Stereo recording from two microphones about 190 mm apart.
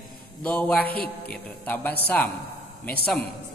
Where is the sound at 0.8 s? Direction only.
55° left (ahead or behind).